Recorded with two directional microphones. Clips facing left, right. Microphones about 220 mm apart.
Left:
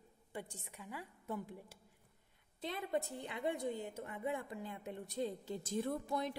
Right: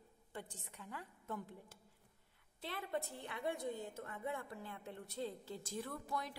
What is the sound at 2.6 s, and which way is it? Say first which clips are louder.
A woman's voice: left 4 dB; 15° left (ahead or behind).